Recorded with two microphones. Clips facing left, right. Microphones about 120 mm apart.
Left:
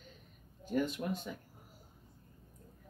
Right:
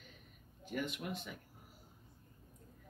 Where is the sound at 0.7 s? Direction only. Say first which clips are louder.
Left 6 dB; 35° left (ahead or behind).